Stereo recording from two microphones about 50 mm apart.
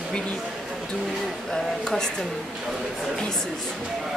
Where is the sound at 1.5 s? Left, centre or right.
Centre.